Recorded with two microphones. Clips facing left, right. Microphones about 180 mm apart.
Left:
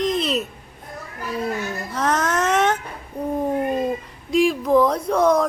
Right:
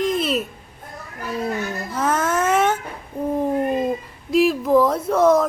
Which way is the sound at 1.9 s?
5° right (ahead or behind).